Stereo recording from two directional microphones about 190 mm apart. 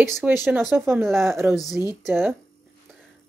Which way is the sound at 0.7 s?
15° right (ahead or behind).